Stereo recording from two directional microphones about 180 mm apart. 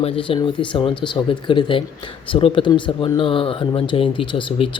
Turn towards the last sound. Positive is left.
turn(degrees=30)  # may be behind; listen again after turning